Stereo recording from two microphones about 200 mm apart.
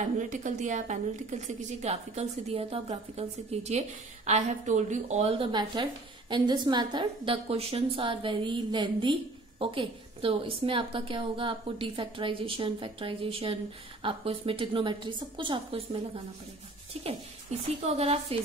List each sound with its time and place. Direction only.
0.2 s a woman's voice: 40° right (ahead or behind)
16.9 s a woman's voice: 30° right (ahead or behind)